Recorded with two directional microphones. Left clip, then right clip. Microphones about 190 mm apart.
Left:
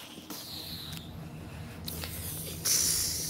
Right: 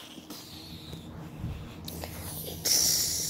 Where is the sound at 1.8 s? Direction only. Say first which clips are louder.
Even; centre (ahead or behind).